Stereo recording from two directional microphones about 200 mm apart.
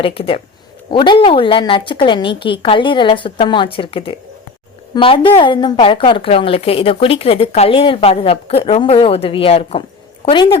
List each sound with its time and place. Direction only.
0.0 s a woman's voice: 25° left (ahead or behind)